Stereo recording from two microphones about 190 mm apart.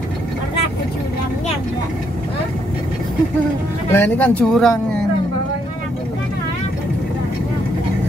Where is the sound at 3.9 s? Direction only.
10° left (ahead or behind).